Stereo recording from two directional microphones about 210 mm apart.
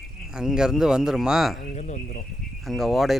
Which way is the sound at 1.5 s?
35° left (ahead or behind).